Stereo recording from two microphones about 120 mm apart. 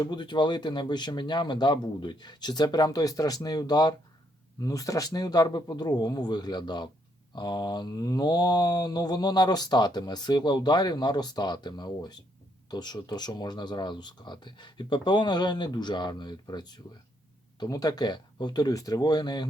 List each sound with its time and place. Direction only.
0.0 s speech: 35° left (ahead or behind)